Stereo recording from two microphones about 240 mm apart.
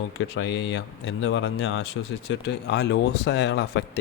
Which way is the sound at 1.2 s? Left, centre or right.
Left.